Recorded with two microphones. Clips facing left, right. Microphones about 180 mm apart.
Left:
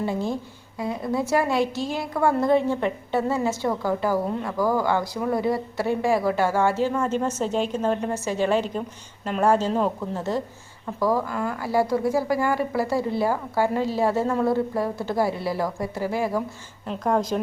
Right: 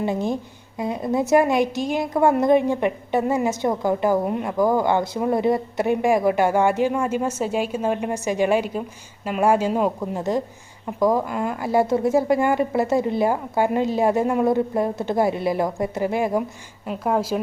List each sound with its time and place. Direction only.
0.0 s a woman's voice: 20° right (ahead or behind)
16.8 s a woman's voice: 5° right (ahead or behind)